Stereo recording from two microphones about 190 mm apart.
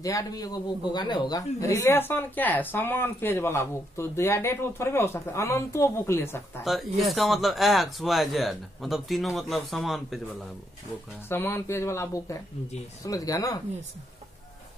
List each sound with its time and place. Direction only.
0.0 s a man's voice: 15° left (ahead or behind)
6.6 s speech: centre (ahead or behind)
11.2 s a man's voice: 10° left (ahead or behind)